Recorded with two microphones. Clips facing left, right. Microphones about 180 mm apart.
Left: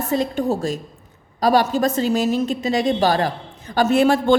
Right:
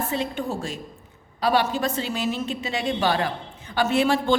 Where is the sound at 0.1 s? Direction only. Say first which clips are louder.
Left 7 dB; 40° left (ahead or behind).